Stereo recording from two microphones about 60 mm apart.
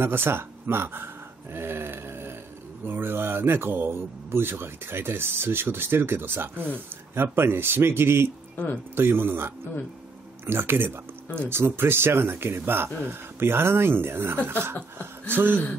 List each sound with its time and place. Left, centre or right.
0.0 s speech: right